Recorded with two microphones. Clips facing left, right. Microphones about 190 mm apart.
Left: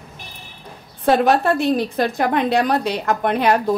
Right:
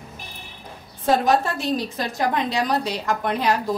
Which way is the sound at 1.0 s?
65° left (ahead or behind).